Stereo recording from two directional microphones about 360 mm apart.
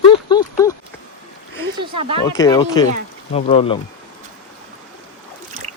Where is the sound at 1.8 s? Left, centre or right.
Centre.